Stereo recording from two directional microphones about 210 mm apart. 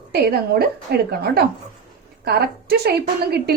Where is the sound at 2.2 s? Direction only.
50° right (ahead or behind).